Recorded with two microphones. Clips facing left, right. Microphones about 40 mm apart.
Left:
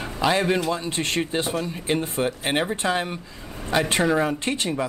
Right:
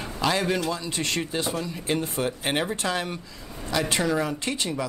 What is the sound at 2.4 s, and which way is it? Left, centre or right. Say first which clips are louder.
Speech: left 3 dB; centre.